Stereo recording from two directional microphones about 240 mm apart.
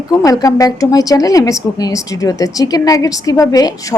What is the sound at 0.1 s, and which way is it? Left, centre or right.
A woman's voice, centre.